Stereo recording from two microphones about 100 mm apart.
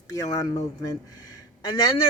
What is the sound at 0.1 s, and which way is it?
Speech, 35° left (ahead or behind).